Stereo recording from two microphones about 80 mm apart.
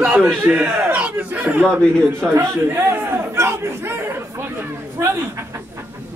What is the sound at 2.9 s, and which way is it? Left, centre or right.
Chatter, right.